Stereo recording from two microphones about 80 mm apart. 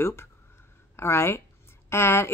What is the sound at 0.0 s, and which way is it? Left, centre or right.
Speech, left.